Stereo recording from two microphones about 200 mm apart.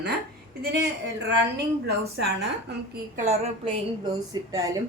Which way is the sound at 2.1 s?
55° right (ahead or behind).